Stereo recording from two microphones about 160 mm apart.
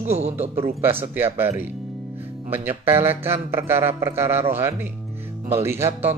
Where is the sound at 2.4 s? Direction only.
10° right (ahead or behind).